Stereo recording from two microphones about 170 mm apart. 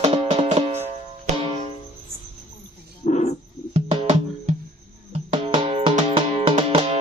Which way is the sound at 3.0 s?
45° left (ahead or behind).